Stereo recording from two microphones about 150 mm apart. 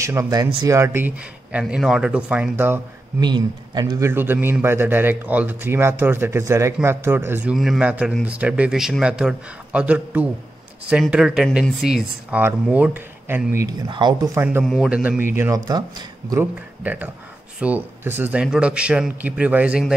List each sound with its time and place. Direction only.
0.0 s a man's voice: 20° right (ahead or behind)
3.2 s a man's voice: 30° right (ahead or behind)
7.5 s a man's voice: centre (ahead or behind)
13.8 s speech: 30° right (ahead or behind)
14.3 s a man's voice: 15° right (ahead or behind)
14.6 s a man's voice: centre (ahead or behind)
15.3 s speech: 20° right (ahead or behind)
16.3 s a man's voice: 10° right (ahead or behind)